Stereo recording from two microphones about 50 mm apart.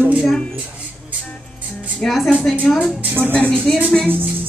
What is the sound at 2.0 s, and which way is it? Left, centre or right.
Speech, centre.